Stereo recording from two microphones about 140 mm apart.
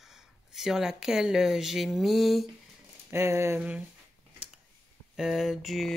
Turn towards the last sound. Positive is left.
turn(degrees=0)  # may be behind; listen again after turning